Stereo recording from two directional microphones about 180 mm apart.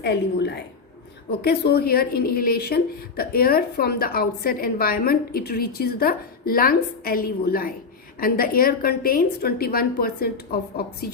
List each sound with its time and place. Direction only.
0.0 s a woman's voice: 70° left (ahead or behind)